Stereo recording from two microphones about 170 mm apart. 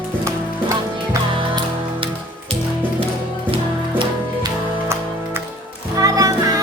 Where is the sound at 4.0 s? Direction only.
25° right (ahead or behind).